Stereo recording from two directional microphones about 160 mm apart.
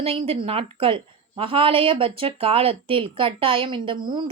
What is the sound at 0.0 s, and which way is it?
A woman's voice, 35° right (ahead or behind).